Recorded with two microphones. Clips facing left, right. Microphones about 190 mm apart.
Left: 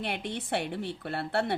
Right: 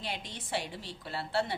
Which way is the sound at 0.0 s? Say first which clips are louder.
Left 7 dB; 60° left (ahead or behind).